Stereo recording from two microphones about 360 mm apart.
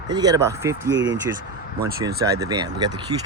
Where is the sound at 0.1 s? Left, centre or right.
Centre.